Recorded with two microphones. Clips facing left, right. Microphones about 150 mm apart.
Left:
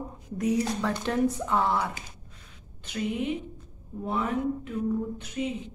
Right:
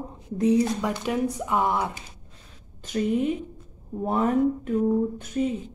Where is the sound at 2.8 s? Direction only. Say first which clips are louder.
Right 6 dB; 40° right (ahead or behind).